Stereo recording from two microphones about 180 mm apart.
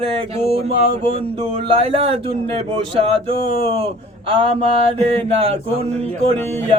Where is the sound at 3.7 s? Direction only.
30° right (ahead or behind).